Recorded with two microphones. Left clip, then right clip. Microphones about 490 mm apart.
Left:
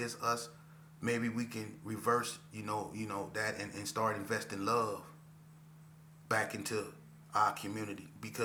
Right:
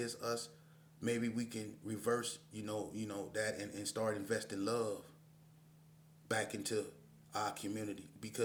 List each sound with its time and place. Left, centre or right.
0.0 s speech: right
6.2 s speech: right